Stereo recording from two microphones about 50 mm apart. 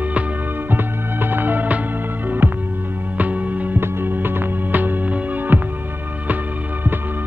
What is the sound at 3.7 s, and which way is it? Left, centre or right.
Music, right.